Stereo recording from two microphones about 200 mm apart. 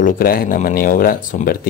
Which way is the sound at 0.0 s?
45° left (ahead or behind).